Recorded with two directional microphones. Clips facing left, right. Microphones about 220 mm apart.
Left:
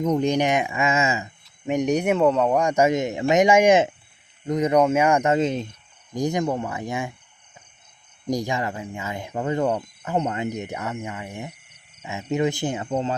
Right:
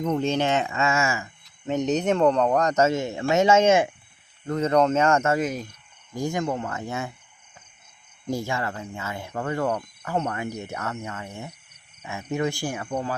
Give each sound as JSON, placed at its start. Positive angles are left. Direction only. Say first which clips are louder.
{"t": 0.0, "sound": "speech", "louder": "left 3 dB", "side_deg": 15}
{"t": 8.3, "sound": "speech", "louder": "left 3 dB", "side_deg": 15}